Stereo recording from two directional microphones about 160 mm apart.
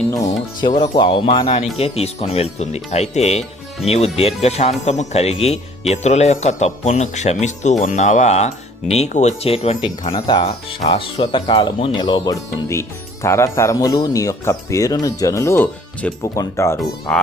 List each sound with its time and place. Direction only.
0.9 s a man's voice: 30° left (ahead or behind)
17.1 s speech: 5° left (ahead or behind)